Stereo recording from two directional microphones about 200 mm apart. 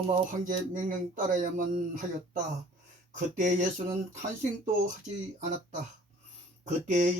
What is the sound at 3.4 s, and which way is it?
Speech, 40° right (ahead or behind).